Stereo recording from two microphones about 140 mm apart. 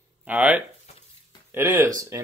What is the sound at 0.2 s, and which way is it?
Speech, 10° right (ahead or behind).